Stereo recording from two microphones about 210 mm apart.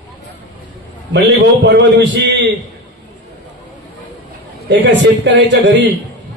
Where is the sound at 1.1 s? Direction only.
55° right (ahead or behind).